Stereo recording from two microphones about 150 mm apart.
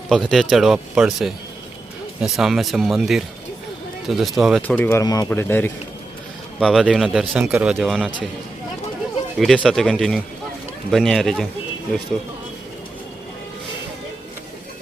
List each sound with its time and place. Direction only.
0.1 s speech: centre (ahead or behind)
4.6 s speech: 10° left (ahead or behind)
5.0 s speech: 25° left (ahead or behind)
5.3 s speech: 15° left (ahead or behind)
6.6 s speech: centre (ahead or behind)
7.4 s speech: 15° right (ahead or behind)
7.7 s speech: centre (ahead or behind)
9.4 s speech: centre (ahead or behind)